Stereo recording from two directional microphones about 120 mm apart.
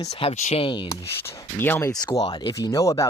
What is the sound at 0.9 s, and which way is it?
Speech, 25° left (ahead or behind).